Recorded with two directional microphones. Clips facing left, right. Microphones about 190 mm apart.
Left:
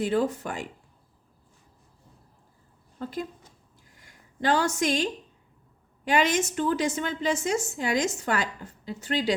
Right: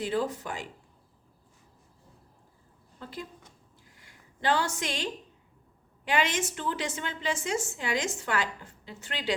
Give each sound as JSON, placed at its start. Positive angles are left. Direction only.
{"t": 0.0, "sound": "speech", "side_deg": 50}
{"t": 3.0, "sound": "speech", "side_deg": 45}
{"t": 6.1, "sound": "a woman's voice", "side_deg": 40}